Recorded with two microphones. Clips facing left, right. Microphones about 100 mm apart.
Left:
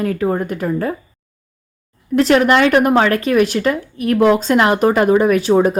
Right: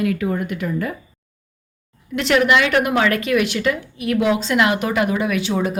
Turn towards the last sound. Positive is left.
turn(degrees=45)  # may be behind; listen again after turning